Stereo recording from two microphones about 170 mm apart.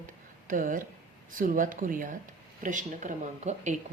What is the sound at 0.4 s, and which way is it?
A woman's voice, 50° right (ahead or behind).